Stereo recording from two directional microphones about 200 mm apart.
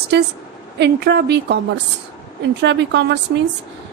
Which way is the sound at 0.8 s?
55° right (ahead or behind).